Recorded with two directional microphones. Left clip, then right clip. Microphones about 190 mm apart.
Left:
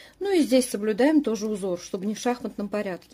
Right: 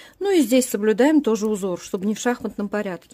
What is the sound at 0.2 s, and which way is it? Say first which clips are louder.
Speech: right 3 dB; 30° right (ahead or behind).